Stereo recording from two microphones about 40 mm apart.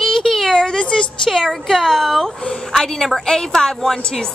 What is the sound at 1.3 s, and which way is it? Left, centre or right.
A woman's voice, centre.